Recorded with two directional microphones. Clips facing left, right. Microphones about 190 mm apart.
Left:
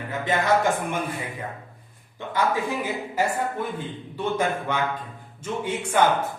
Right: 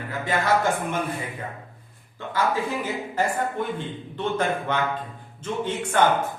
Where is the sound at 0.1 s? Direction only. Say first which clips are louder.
Left 1 dB; 20° left (ahead or behind).